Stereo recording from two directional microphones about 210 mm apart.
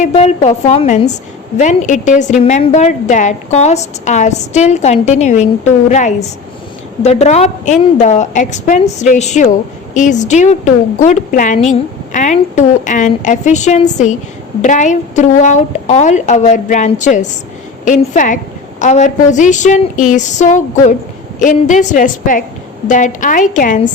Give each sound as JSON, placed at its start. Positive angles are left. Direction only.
{"t": 0.1, "sound": "a woman's voice", "side_deg": 30}